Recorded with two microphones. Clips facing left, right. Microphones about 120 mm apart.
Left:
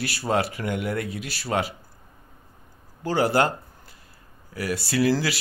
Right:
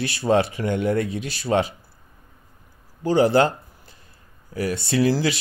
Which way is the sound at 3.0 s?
20° right (ahead or behind).